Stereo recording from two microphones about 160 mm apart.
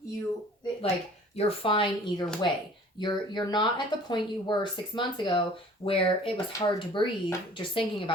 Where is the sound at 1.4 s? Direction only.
35° left (ahead or behind).